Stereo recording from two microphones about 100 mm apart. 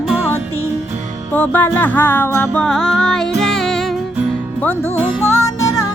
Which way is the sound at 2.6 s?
5° left (ahead or behind).